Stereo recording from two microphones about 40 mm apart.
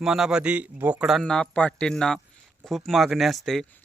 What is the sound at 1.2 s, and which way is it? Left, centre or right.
Speech, centre.